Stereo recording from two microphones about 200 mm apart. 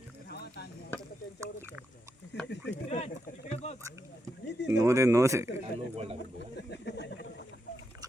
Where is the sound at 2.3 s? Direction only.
55° left (ahead or behind).